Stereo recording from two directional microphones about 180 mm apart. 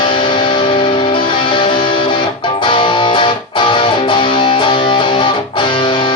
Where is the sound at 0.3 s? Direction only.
25° left (ahead or behind).